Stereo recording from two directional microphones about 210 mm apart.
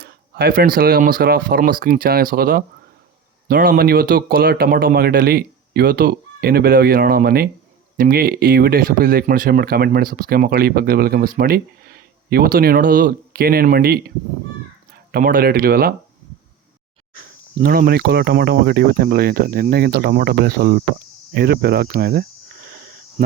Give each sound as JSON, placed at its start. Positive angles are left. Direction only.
{"t": 0.0, "sound": "speech", "side_deg": -45}
{"t": 15.1, "sound": "speech", "side_deg": -45}
{"t": 17.2, "sound": "speech", "side_deg": -45}